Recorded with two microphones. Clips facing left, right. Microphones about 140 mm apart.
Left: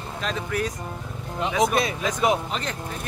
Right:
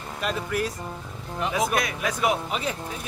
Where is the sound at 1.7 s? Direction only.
25° left (ahead or behind).